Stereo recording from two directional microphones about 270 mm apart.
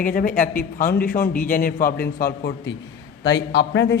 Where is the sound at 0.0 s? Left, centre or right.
Left.